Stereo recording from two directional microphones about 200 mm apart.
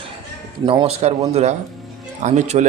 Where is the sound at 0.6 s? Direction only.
25° right (ahead or behind).